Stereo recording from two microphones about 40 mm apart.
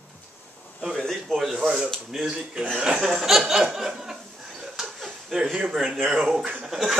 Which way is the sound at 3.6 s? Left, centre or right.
Centre.